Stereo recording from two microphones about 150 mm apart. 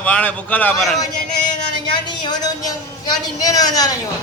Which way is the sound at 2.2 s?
25° left (ahead or behind).